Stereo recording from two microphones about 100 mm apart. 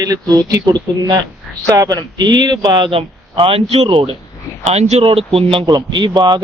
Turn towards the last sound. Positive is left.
turn(degrees=-50)  # may be behind; listen again after turning